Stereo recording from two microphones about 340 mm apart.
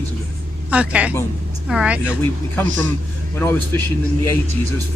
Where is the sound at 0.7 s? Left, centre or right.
Centre.